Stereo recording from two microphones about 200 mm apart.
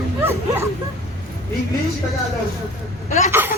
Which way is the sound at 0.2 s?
10° right (ahead or behind).